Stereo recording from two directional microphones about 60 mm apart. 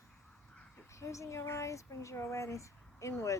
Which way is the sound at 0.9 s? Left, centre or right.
Left.